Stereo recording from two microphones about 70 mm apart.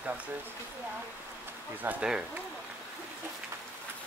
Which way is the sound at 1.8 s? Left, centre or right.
Right.